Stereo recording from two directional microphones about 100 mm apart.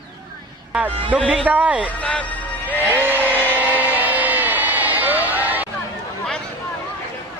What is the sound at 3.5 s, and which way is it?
Vehicle, 15° right (ahead or behind).